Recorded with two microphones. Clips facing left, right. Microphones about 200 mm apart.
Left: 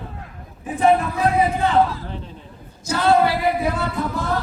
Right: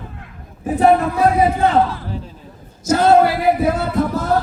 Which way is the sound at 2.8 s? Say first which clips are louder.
Right 8 dB; 45° right (ahead or behind).